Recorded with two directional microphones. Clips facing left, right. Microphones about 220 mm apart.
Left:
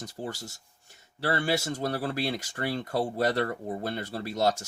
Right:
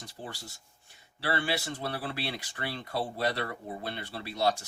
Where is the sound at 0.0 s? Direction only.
45° left (ahead or behind).